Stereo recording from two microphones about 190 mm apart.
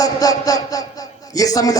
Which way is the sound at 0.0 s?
20° left (ahead or behind).